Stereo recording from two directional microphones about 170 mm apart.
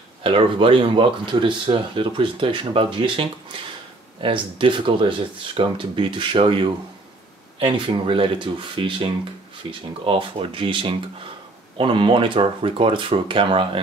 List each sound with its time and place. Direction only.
0.2 s speech: 30° right (ahead or behind)